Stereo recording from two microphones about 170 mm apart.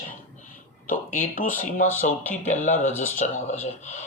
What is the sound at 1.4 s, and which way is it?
Speech, 50° left (ahead or behind).